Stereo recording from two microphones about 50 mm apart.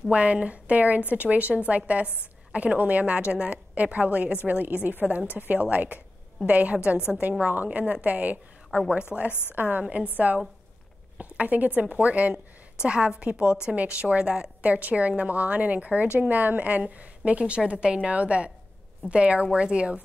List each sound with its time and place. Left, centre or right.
0.1 s a woman's voice: right
9.3 s a woman's voice: left
9.6 s a woman's voice: right
14.7 s a woman's voice: right